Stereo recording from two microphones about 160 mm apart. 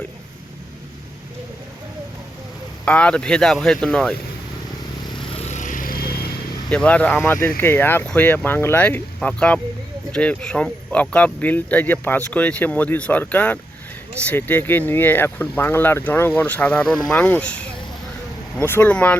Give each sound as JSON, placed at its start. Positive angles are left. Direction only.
{"t": 2.8, "sound": "speech", "side_deg": 5}
{"t": 5.5, "sound": "vehicle", "side_deg": 50}
{"t": 6.7, "sound": "speech", "side_deg": 5}